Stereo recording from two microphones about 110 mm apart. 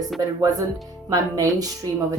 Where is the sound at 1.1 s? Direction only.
35° right (ahead or behind).